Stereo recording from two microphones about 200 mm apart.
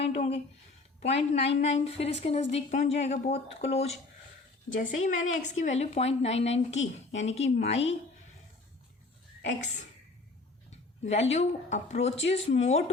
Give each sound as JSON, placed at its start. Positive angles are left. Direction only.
{"t": 0.0, "sound": "a woman's voice", "side_deg": 30}
{"t": 9.6, "sound": "a woman's voice", "side_deg": 35}